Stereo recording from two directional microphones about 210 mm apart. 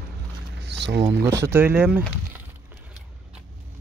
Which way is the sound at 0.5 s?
55° right (ahead or behind).